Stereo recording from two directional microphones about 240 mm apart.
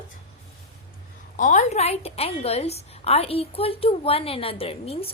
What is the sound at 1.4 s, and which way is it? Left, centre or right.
A woman's voice, left.